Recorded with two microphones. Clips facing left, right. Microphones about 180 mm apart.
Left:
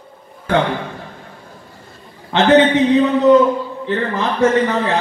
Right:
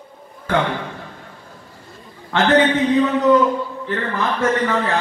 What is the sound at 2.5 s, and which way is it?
A man's voice, 25° left (ahead or behind).